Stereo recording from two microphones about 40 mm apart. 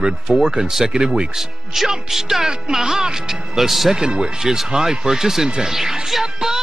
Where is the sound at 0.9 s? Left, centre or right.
Right; by 3.9 s centre.